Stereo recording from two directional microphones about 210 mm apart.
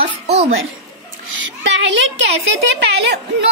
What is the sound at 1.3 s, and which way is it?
A woman's voice, 60° right (ahead or behind).